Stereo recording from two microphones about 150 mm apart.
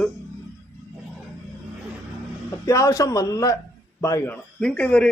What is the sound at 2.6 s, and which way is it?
A man's voice, 20° left (ahead or behind).